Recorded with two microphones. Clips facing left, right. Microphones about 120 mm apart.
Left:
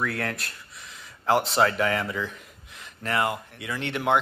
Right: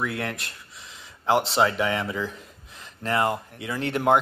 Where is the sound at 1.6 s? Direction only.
15° right (ahead or behind).